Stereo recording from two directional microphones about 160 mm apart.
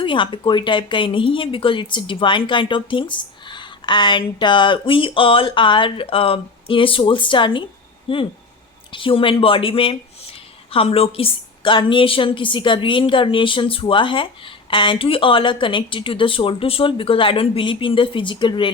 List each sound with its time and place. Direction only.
0.0 s a woman's voice: 30° left (ahead or behind)